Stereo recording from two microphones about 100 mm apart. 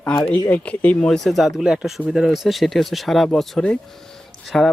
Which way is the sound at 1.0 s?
5° left (ahead or behind).